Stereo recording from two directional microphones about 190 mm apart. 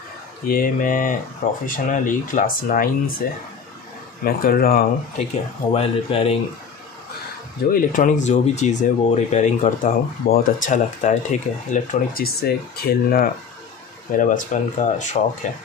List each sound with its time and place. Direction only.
0.5 s speech: 45° left (ahead or behind)
5.7 s speech: 30° left (ahead or behind)
7.7 s speech: 45° left (ahead or behind)